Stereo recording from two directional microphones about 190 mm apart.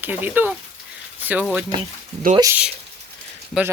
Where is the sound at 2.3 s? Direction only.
15° right (ahead or behind).